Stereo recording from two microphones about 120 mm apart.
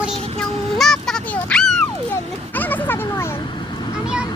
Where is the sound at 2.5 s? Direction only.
15° left (ahead or behind).